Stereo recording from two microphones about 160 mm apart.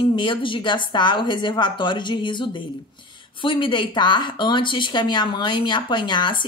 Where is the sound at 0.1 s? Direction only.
30° left (ahead or behind).